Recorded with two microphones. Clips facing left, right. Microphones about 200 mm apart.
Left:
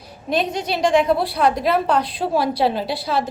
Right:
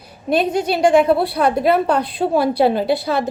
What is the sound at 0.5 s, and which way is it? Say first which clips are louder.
A woman's voice: right 4 dB; 50° right (ahead or behind).